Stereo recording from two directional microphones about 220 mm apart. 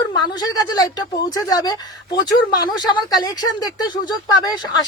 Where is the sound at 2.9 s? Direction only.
20° left (ahead or behind).